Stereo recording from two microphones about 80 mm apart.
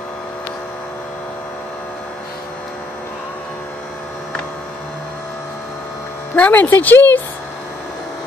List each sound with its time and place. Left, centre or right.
6.3 s speech: centre